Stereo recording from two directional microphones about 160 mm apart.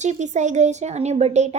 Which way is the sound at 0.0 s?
45° right (ahead or behind).